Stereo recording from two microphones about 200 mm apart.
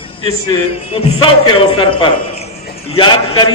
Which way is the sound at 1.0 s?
25° left (ahead or behind).